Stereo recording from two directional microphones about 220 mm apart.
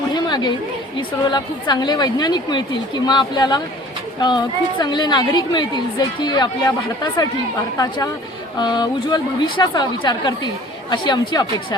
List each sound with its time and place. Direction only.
0.1 s chatter: 20° left (ahead or behind)
0.9 s a woman's voice: 20° left (ahead or behind)